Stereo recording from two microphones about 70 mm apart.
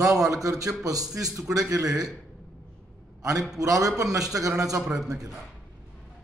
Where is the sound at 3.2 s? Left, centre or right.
Right.